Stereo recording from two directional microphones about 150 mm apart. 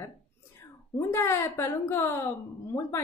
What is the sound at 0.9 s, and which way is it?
Speech, 15° left (ahead or behind).